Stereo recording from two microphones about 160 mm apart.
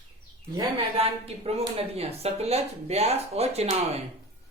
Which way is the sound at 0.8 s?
35° right (ahead or behind).